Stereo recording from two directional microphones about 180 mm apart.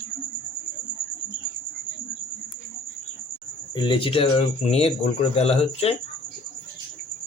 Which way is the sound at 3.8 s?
25° left (ahead or behind).